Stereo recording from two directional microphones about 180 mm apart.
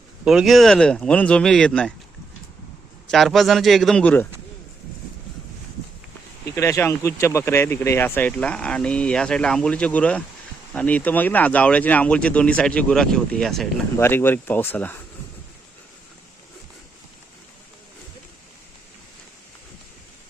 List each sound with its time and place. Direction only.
0.3 s speech: centre (ahead or behind)
3.1 s speech: centre (ahead or behind)
6.4 s speech: 15° left (ahead or behind)